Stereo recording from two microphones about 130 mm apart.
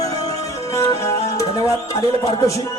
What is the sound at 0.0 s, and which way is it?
Music, 25° left (ahead or behind).